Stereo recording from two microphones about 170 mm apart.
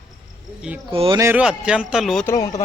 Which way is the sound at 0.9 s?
30° right (ahead or behind).